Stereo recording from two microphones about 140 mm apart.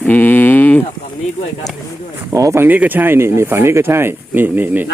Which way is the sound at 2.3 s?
20° right (ahead or behind).